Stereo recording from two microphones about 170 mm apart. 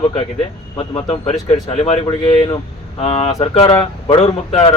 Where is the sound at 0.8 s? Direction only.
35° left (ahead or behind).